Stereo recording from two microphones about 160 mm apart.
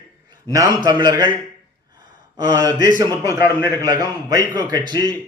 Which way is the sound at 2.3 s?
25° right (ahead or behind).